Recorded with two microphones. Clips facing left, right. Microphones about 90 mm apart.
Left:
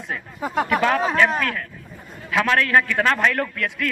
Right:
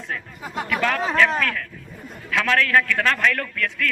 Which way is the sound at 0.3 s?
55° left (ahead or behind).